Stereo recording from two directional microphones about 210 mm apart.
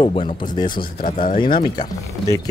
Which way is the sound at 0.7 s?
40° left (ahead or behind).